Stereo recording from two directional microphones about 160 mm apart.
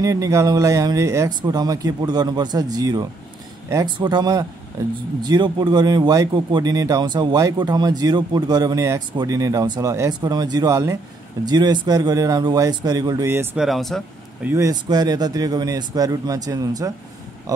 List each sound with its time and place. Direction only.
0.0 s speech: 20° right (ahead or behind)
13.6 s speech: centre (ahead or behind)
14.4 s speech: 15° right (ahead or behind)